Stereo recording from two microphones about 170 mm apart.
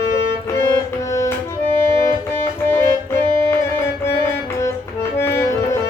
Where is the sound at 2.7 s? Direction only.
15° left (ahead or behind).